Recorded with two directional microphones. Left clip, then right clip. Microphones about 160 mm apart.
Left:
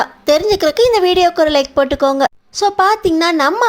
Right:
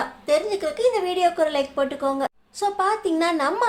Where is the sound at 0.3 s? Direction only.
50° left (ahead or behind).